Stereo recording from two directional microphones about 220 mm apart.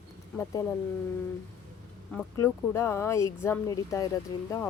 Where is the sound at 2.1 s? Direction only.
10° left (ahead or behind).